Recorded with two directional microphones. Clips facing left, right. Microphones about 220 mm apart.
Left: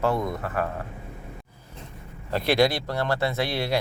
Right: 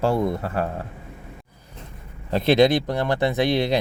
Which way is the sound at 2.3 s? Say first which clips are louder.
Right 5 dB; 20° right (ahead or behind).